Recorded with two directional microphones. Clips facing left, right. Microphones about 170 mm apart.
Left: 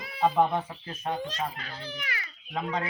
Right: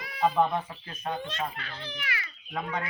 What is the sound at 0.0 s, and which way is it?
Speech, 25° left (ahead or behind).